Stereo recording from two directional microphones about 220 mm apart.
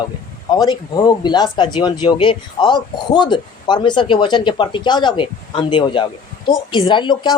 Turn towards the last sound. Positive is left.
turn(degrees=20)  # may be behind; listen again after turning